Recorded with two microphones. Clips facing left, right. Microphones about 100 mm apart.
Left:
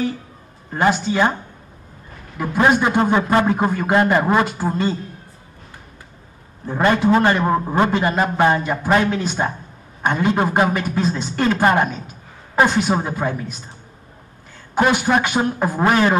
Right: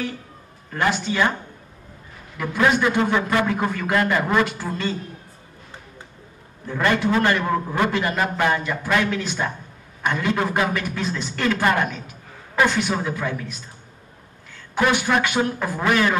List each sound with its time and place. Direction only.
0.7 s speech: 30° left (ahead or behind)
2.3 s a man's voice: 35° left (ahead or behind)
6.8 s a man's voice: 35° left (ahead or behind)
14.8 s a man's voice: 40° left (ahead or behind)